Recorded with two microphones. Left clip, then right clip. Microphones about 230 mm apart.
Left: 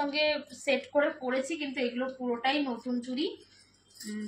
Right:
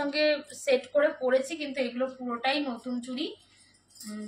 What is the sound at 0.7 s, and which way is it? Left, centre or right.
A woman's voice, centre.